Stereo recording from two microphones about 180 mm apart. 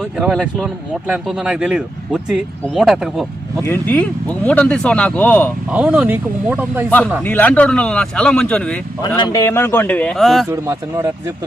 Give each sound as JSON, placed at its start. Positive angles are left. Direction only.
{"t": 0.2, "sound": "speech", "side_deg": 0}
{"t": 3.6, "sound": "speech", "side_deg": 10}
{"t": 5.7, "sound": "speech", "side_deg": -10}
{"t": 7.3, "sound": "speech", "side_deg": 10}
{"t": 9.0, "sound": "speech", "side_deg": 20}
{"t": 10.5, "sound": "speech", "side_deg": -15}